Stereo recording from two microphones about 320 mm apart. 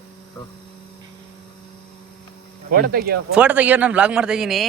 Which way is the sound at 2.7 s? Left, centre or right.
Right.